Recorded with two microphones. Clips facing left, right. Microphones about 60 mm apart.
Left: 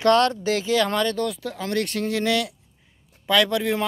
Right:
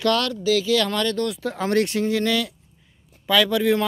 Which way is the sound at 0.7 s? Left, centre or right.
Left.